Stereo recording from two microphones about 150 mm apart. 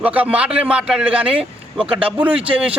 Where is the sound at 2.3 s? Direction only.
35° right (ahead or behind).